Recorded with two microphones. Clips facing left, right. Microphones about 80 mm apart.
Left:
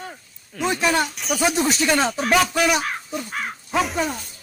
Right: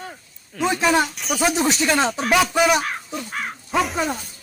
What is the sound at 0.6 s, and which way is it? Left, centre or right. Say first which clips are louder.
Speech: right 2 dB; centre.